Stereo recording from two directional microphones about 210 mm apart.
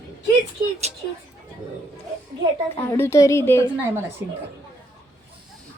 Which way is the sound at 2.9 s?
15° left (ahead or behind).